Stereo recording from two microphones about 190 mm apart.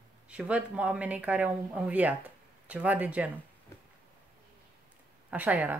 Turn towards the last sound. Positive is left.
turn(degrees=-10)  # may be behind; listen again after turning